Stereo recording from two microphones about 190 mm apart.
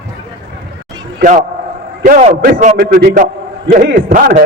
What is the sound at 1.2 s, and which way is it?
A man's voice, 45° right (ahead or behind).